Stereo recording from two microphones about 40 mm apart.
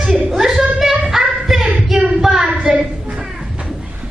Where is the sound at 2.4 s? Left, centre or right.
Right.